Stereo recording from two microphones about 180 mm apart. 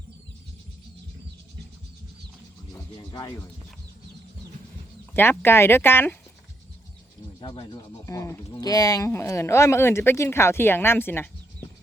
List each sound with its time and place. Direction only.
2.7 s speech: 20° left (ahead or behind)
5.1 s speech: 10° left (ahead or behind)
7.3 s speech: 25° left (ahead or behind)